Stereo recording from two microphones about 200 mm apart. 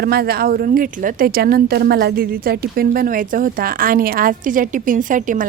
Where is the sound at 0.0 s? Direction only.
50° right (ahead or behind).